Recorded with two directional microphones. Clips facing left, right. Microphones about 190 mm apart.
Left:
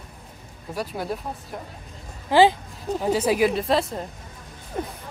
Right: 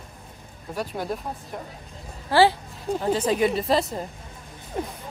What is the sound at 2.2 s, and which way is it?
Speech, 15° left (ahead or behind).